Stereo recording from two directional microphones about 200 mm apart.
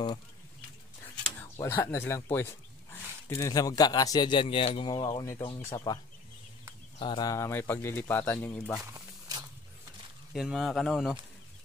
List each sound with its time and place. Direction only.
1.6 s speech: 15° left (ahead or behind)
7.0 s speech: 20° left (ahead or behind); by 8.8 s 5° left (ahead or behind)
8.8 s a sound: 15° right (ahead or behind)
10.3 s speech: centre (ahead or behind)